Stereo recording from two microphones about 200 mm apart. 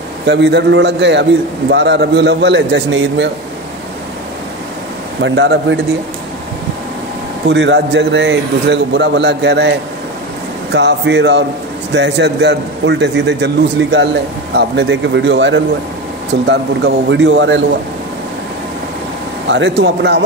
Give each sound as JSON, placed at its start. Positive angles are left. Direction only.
{"t": 0.3, "sound": "a man's voice", "side_deg": -55}
{"t": 5.2, "sound": "a man's voice", "side_deg": -60}
{"t": 7.4, "sound": "a man's voice", "side_deg": -60}
{"t": 19.5, "sound": "a man's voice", "side_deg": -60}